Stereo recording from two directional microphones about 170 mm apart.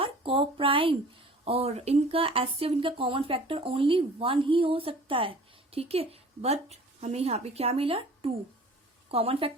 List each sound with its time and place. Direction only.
0.0 s a woman's voice: 30° right (ahead or behind)